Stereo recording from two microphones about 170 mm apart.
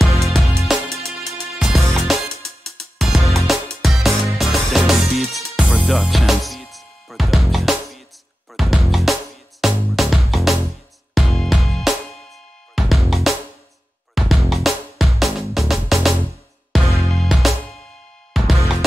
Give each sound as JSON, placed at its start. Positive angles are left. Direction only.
{"t": 0.0, "sound": "music", "side_deg": 0}